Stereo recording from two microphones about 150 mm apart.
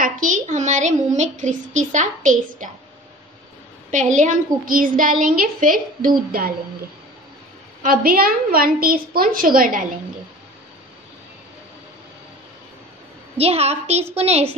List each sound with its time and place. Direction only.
0.0 s a woman's voice: 60° right (ahead or behind)
3.9 s a woman's voice: 55° right (ahead or behind); by 6.5 s 75° right (ahead or behind)
7.8 s a woman's voice: 75° right (ahead or behind)
13.4 s a woman's voice: 45° right (ahead or behind)